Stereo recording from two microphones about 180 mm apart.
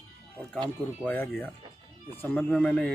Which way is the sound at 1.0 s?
10° left (ahead or behind).